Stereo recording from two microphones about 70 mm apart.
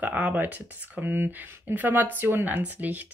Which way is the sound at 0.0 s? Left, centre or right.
Right.